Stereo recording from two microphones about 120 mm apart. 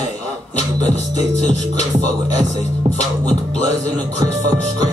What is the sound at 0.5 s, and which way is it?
Music, 35° right (ahead or behind).